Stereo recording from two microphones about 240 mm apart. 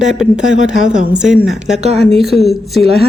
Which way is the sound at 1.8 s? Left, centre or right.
Right.